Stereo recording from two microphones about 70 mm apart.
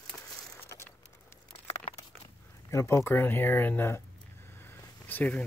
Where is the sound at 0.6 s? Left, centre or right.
Left.